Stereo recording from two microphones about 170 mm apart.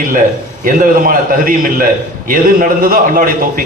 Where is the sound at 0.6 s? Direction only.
55° right (ahead or behind).